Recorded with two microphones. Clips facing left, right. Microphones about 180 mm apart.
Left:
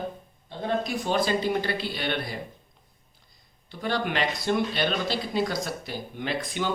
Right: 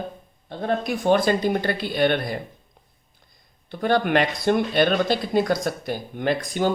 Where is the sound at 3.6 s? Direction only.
50° right (ahead or behind).